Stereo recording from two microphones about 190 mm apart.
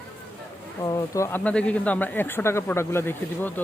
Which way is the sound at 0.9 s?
20° left (ahead or behind).